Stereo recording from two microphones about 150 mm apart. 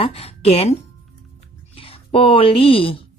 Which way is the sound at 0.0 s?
40° left (ahead or behind).